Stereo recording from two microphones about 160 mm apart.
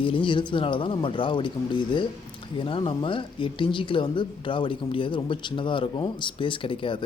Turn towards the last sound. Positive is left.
turn(degrees=30)  # may be behind; listen again after turning